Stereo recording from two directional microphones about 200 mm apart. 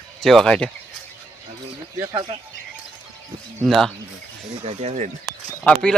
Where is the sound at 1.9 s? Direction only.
15° right (ahead or behind).